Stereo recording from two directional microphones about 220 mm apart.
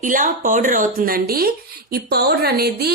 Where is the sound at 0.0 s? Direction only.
35° right (ahead or behind).